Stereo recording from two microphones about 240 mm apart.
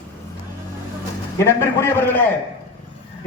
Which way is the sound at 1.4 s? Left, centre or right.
Centre.